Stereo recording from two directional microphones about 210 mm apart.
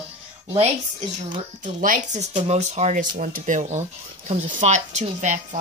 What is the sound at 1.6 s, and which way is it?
Speech, 40° right (ahead or behind).